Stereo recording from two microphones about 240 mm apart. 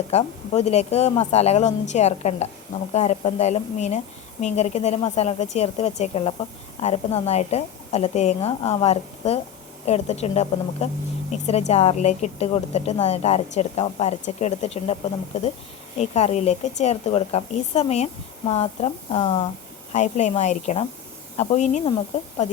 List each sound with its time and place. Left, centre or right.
0.1 s speech: left
16.0 s speech: left